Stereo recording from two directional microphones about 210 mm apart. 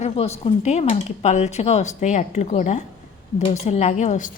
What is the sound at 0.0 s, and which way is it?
Speech, 30° left (ahead or behind).